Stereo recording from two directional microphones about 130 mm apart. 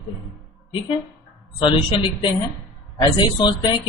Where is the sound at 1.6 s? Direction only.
40° left (ahead or behind).